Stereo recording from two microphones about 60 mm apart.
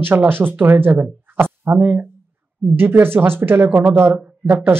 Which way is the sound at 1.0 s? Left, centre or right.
Right.